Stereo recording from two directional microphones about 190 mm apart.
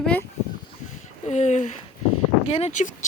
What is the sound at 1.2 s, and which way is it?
Speech, 35° left (ahead or behind).